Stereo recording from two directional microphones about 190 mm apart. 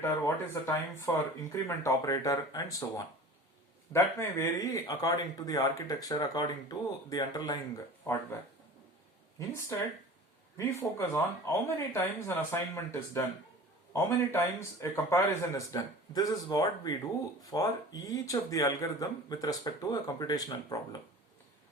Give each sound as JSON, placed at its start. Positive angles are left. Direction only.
{"t": 0.0, "sound": "speech", "side_deg": 15}
{"t": 10.6, "sound": "speech", "side_deg": 15}